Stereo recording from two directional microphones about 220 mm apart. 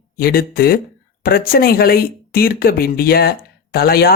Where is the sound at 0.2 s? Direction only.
45° left (ahead or behind).